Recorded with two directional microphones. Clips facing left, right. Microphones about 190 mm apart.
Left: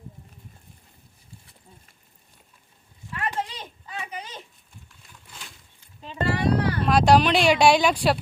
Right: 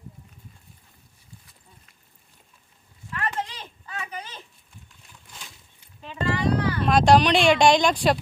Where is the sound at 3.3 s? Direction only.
10° left (ahead or behind).